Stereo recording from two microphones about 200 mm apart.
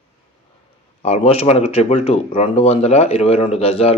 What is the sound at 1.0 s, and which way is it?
Speech, 30° left (ahead or behind).